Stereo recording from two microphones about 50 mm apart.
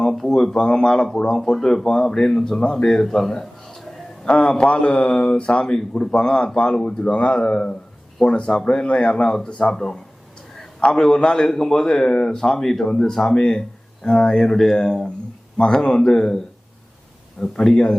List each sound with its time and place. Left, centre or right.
0.0 s speech: centre
4.3 s a man's voice: left
9.7 s speech: centre
17.4 s speech: centre